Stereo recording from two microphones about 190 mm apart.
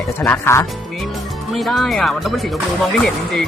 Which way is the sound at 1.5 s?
Centre (ahead or behind).